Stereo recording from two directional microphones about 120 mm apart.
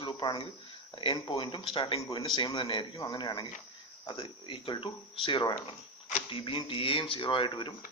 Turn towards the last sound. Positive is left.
turn(degrees=45)  # may be behind; listen again after turning